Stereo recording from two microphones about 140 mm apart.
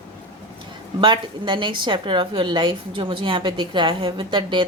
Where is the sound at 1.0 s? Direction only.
35° right (ahead or behind).